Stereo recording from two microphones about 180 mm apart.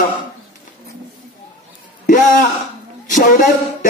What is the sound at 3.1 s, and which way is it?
Speech, 45° left (ahead or behind).